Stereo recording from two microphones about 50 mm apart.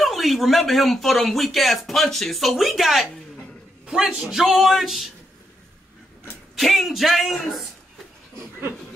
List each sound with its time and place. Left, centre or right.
0.0 s speech: centre
3.8 s a man's voice: centre
6.5 s speech: centre